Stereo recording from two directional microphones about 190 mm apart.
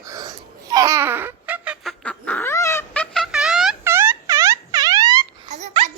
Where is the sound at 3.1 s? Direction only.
Centre (ahead or behind).